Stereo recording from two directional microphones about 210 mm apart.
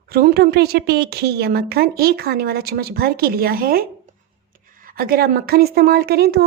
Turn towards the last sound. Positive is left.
turn(degrees=-50)  # may be behind; listen again after turning